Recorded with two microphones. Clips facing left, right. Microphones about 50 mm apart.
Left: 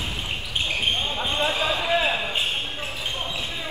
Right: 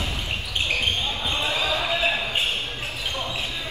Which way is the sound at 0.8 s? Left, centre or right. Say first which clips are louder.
Left 1 dB; left.